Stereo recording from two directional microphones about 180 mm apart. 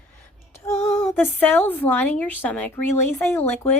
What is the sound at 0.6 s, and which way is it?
A woman's voice, 15° left (ahead or behind).